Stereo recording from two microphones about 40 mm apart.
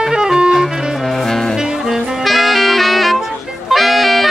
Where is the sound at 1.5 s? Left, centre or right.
Centre.